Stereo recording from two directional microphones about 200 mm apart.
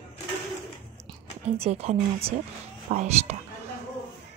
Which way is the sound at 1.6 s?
30° right (ahead or behind).